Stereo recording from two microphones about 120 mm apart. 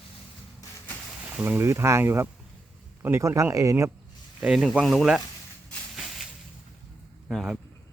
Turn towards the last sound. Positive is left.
turn(degrees=0)  # may be behind; listen again after turning